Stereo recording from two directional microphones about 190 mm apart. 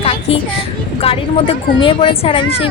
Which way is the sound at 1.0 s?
30° left (ahead or behind).